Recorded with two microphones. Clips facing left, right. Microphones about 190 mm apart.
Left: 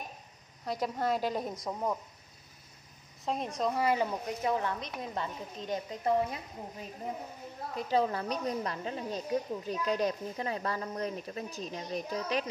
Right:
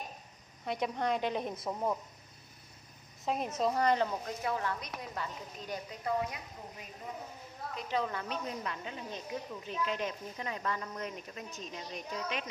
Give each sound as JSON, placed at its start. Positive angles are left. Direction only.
{"t": 0.7, "sound": "a woman's voice", "side_deg": 0}
{"t": 3.3, "sound": "a woman's voice", "side_deg": -5}
{"t": 4.4, "sound": "speech", "side_deg": 20}
{"t": 7.9, "sound": "a woman's voice", "side_deg": 35}